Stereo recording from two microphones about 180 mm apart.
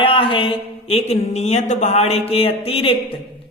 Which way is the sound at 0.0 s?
30° left (ahead or behind).